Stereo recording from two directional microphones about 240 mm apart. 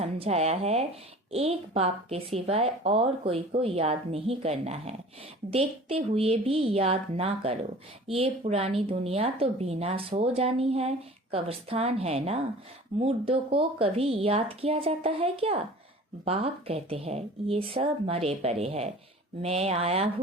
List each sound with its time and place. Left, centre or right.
0.0 s speech: right